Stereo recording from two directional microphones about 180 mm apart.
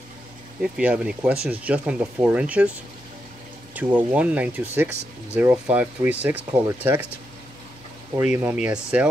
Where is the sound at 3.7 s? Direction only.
10° right (ahead or behind).